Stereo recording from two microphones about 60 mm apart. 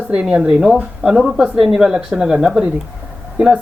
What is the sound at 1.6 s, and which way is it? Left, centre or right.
Speech, centre.